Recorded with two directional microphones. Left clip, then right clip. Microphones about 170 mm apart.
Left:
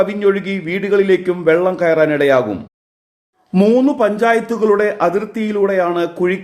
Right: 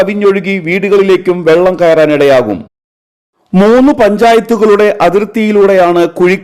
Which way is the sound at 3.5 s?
45° right (ahead or behind).